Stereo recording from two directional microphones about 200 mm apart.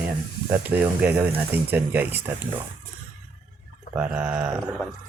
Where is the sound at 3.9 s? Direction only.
10° right (ahead or behind).